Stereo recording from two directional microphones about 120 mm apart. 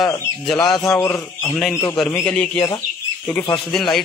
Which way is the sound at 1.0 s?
20° left (ahead or behind).